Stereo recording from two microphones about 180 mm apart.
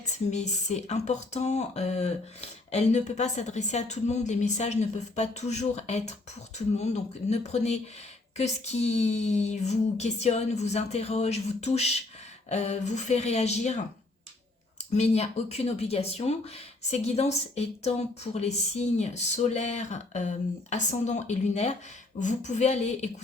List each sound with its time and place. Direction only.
0.3 s speech: 40° left (ahead or behind)
14.9 s speech: 35° left (ahead or behind)